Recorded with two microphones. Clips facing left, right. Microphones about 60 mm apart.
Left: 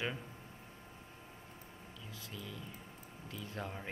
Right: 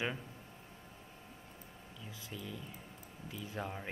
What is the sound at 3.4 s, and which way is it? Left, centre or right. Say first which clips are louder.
Speech: right 2 dB; centre.